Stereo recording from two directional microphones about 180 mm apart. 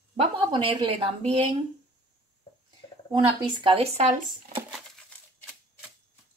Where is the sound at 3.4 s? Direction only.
25° right (ahead or behind).